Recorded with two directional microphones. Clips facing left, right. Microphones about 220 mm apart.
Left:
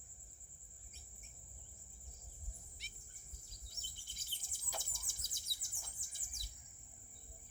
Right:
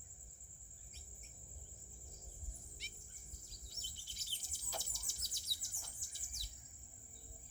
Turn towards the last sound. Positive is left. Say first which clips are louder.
# right 1 dB
turn(degrees=50)  # may be behind; listen again after turning